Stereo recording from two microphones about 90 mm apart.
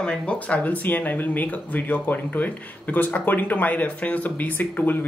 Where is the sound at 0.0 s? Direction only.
15° left (ahead or behind).